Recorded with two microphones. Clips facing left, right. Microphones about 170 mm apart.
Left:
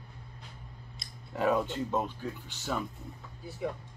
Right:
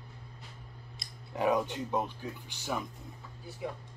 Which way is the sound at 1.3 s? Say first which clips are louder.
Left 1 dB; 15° right (ahead or behind).